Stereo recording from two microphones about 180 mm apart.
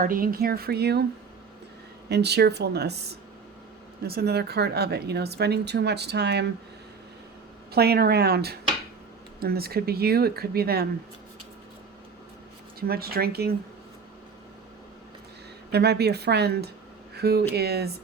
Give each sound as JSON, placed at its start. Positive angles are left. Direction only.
{"t": 0.0, "sound": "speech", "side_deg": -50}
{"t": 2.0, "sound": "speech", "side_deg": -65}
{"t": 7.7, "sound": "speech", "side_deg": -60}
{"t": 12.9, "sound": "speech", "side_deg": -60}
{"t": 15.7, "sound": "speech", "side_deg": -65}